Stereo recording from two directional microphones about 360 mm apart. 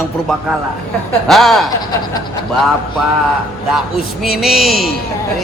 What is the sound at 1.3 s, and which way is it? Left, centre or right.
Speech, centre.